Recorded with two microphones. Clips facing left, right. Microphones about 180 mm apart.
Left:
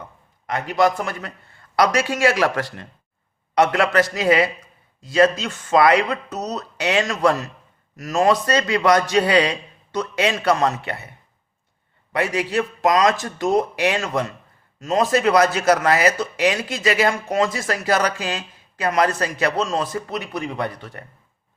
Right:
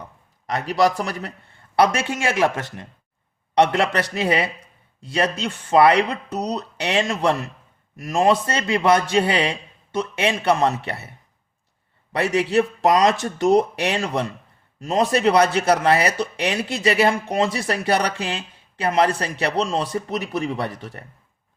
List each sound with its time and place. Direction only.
1.7 s speech: 25° right (ahead or behind)
12.1 s speech: 30° right (ahead or behind)